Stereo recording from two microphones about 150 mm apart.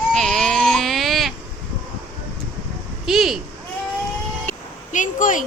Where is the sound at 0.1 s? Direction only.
5° left (ahead or behind).